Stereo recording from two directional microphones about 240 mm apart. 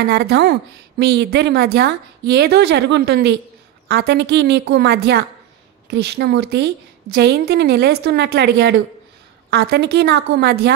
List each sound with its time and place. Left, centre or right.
0.1 s a woman's voice: right